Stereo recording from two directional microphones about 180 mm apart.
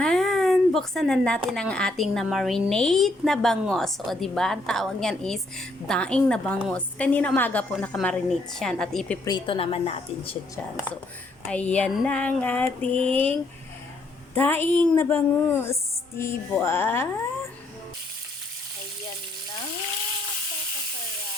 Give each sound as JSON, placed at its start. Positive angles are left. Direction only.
{"t": 0.0, "sound": "a sound", "side_deg": 5}
{"t": 1.5, "sound": "a woman's voice", "side_deg": 5}
{"t": 9.2, "sound": "a woman's voice", "side_deg": 25}
{"t": 11.4, "sound": "a woman's voice", "side_deg": 5}
{"t": 14.3, "sound": "a woman's voice", "side_deg": 10}